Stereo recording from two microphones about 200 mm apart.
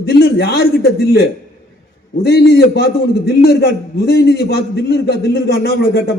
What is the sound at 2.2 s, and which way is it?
A man's voice, 55° left (ahead or behind).